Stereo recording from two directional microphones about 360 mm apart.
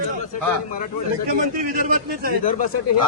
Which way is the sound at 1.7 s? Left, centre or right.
Right.